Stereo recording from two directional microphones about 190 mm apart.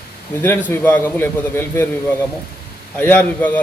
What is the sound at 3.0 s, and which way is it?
Speech, 10° left (ahead or behind).